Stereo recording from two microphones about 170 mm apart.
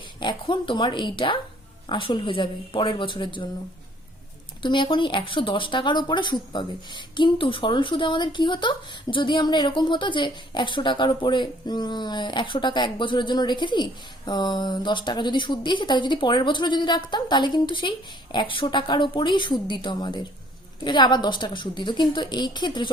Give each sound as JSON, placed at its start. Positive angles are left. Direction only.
{"t": 0.2, "sound": "speech", "side_deg": 25}
{"t": 4.6, "sound": "speech", "side_deg": 30}